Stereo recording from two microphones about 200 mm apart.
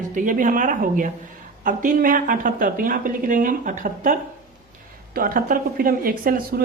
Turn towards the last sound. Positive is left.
turn(degrees=-45)  # may be behind; listen again after turning